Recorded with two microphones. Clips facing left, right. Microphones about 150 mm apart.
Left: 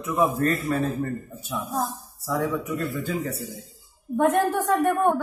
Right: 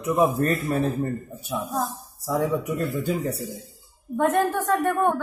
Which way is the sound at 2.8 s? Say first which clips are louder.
Right 2 dB; 15° right (ahead or behind).